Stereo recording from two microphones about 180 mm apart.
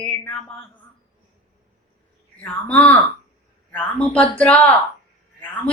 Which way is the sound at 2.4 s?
5° left (ahead or behind).